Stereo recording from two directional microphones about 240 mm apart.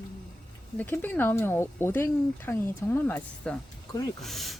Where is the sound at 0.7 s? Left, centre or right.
Centre.